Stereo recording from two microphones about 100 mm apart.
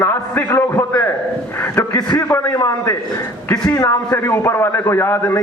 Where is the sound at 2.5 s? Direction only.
35° left (ahead or behind).